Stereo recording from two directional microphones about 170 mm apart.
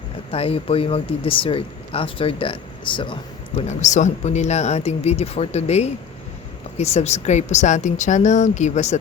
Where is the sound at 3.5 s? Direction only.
45° left (ahead or behind).